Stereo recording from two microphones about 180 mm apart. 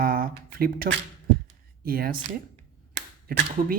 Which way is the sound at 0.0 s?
55° right (ahead or behind).